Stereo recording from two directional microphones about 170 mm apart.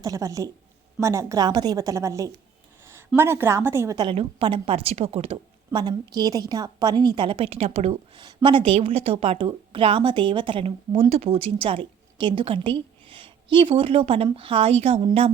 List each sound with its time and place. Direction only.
0.0 s a woman's voice: 20° right (ahead or behind); by 15.3 s 35° right (ahead or behind)